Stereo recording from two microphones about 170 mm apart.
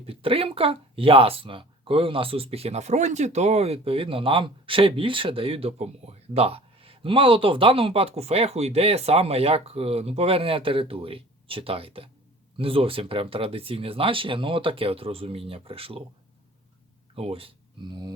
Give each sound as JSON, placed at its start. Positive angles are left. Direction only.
{"t": 0.0, "sound": "speech", "side_deg": -35}
{"t": 17.2, "sound": "speech", "side_deg": -35}